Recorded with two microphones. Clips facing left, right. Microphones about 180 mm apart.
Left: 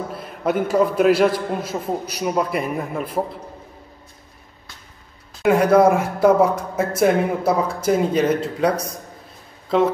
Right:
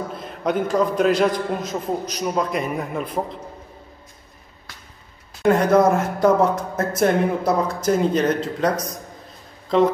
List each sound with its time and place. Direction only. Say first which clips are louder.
0.1 s a man's voice: left 2 dB; 5° left (ahead or behind)
5.4 s a man's voice: left 2 dB; 5° left (ahead or behind)